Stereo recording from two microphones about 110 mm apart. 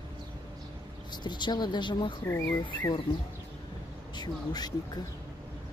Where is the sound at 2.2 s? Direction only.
20° left (ahead or behind).